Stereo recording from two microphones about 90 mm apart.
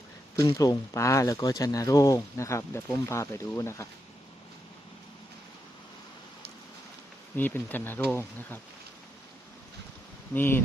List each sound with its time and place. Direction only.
0.3 s speech: 40° left (ahead or behind)
7.3 s speech: 20° left (ahead or behind)
10.3 s speech: 25° left (ahead or behind)